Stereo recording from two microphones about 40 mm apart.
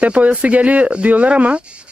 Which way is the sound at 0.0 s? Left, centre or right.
Right.